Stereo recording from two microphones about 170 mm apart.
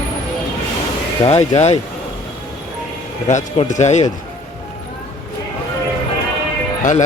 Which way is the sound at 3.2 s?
45° left (ahead or behind).